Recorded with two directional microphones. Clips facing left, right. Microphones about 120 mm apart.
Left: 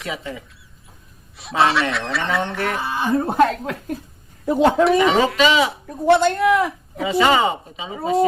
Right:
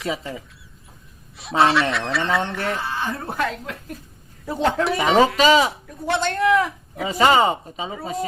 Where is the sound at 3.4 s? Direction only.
50° left (ahead or behind).